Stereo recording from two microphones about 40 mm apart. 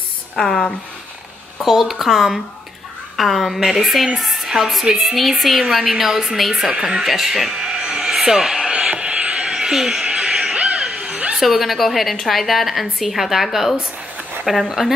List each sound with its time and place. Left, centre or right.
0.4 s speech: centre
1.6 s a woman's voice: centre
6.7 s speech: centre
7.1 s a woman's voice: centre
7.5 s a sound: centre
8.7 s a sound: right
9.4 s frog: centre
10.1 s a sound: centre
11.3 s a woman's voice: centre